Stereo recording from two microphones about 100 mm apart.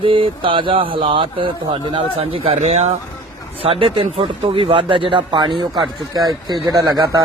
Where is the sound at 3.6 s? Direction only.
70° right (ahead or behind); by 5.6 s 55° right (ahead or behind).